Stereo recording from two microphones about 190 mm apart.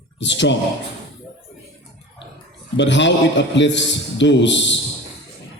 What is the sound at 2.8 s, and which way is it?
A man's voice, 70° left (ahead or behind).